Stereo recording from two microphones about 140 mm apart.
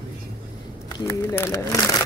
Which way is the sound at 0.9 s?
20° left (ahead or behind).